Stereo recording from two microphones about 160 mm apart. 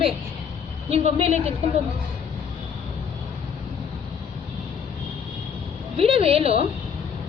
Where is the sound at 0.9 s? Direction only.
40° right (ahead or behind).